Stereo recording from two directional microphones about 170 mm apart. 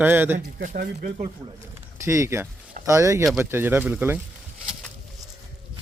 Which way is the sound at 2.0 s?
15° right (ahead or behind).